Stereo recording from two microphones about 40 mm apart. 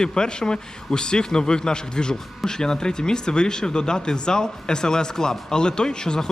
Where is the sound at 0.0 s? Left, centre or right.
Left.